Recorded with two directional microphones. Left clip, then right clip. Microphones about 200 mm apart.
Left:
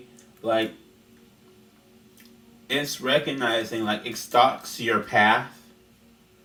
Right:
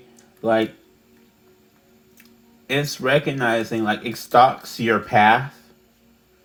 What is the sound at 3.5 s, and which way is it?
Speech, 45° right (ahead or behind).